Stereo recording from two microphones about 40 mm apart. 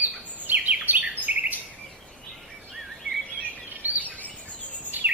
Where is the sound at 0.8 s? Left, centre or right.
Right.